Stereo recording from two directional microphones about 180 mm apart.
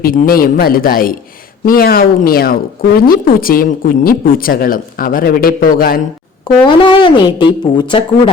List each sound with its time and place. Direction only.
0.0 s speech: 55° left (ahead or behind)
6.7 s a woman's voice: 25° left (ahead or behind)